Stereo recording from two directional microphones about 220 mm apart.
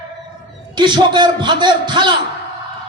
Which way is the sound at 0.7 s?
20° right (ahead or behind).